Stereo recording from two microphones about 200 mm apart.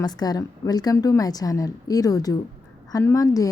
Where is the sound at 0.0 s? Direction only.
20° left (ahead or behind).